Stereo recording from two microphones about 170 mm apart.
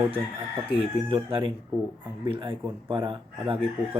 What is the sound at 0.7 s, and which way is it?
Speech, 30° right (ahead or behind).